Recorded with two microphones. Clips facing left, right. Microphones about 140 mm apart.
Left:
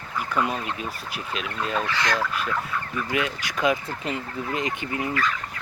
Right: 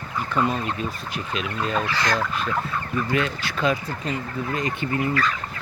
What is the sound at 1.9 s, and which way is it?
Speech, 35° right (ahead or behind).